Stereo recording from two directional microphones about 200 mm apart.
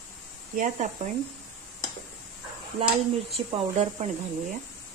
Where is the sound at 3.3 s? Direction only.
30° right (ahead or behind).